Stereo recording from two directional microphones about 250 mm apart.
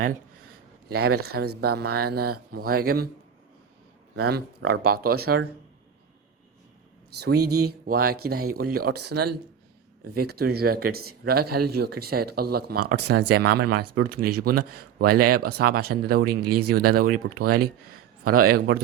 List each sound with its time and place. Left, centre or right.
1.3 s speech: right
4.2 s speech: right
7.2 s speech: right
16.4 s speech: right
16.6 s speech: right